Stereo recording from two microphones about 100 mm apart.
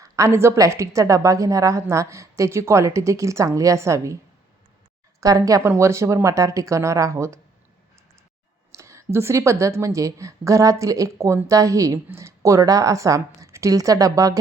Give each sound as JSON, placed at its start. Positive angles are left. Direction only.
{"t": 0.0, "sound": "a woman's voice", "side_deg": -30}
{"t": 5.2, "sound": "a woman's voice", "side_deg": -35}
{"t": 8.7, "sound": "a woman's voice", "side_deg": -30}